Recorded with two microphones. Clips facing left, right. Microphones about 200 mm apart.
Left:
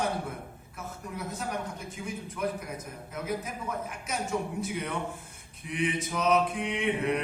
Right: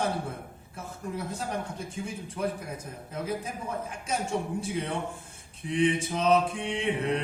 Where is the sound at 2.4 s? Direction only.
30° right (ahead or behind).